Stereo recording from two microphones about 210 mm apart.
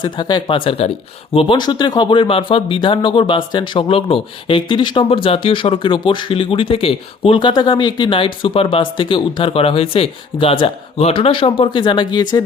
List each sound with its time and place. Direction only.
0.0 s speech: 20° left (ahead or behind)